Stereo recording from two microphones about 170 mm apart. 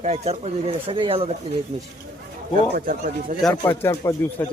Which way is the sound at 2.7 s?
50° right (ahead or behind).